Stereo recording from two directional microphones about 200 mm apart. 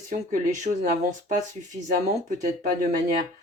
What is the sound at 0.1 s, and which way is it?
Speech, 40° right (ahead or behind).